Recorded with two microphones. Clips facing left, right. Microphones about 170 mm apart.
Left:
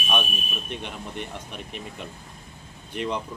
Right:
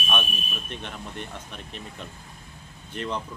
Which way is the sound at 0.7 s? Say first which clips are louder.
Left 2 dB; 15° left (ahead or behind).